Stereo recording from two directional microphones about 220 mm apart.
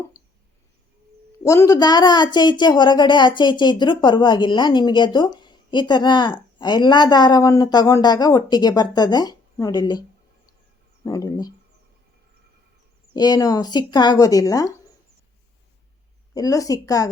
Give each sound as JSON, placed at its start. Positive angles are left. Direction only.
{"t": 1.5, "sound": "speech", "side_deg": 15}
{"t": 11.0, "sound": "speech", "side_deg": 15}
{"t": 13.1, "sound": "speech", "side_deg": 15}
{"t": 16.3, "sound": "speech", "side_deg": 15}